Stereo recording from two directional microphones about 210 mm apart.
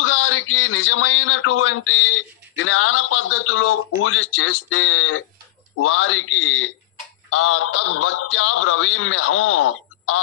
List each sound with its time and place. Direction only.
0.0 s a man's voice: 70° left (ahead or behind)